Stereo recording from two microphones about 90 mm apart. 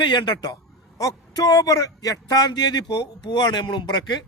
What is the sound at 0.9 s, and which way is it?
A man's voice, 40° left (ahead or behind).